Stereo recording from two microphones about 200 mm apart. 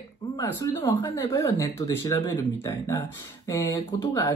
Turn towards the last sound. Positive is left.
turn(degrees=15)  # may be behind; listen again after turning